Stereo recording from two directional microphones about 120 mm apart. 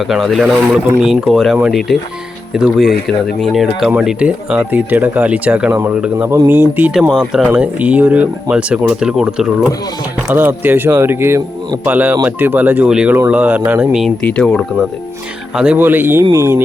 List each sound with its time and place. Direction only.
0.1 s speech: centre (ahead or behind)
7.1 s speech: centre (ahead or behind)
7.4 s speech: 15° right (ahead or behind)
10.3 s speech: 15° right (ahead or behind)
13.9 s speech: centre (ahead or behind)
15.5 s speech: 10° right (ahead or behind)